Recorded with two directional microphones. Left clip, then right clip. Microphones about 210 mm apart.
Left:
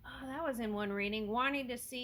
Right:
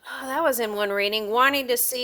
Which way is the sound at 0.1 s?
50° right (ahead or behind).